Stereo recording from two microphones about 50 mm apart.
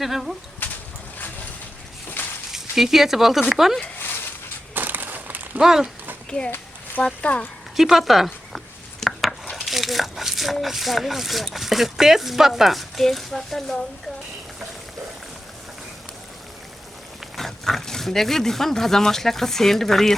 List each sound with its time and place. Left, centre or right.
0.0 s speech: centre
2.5 s speech: centre
4.7 s a sound: right
5.5 s speech: centre
7.0 s speech: left
7.8 s speech: centre
9.0 s chopping: centre
9.6 s speech: centre
17.3 s speech: centre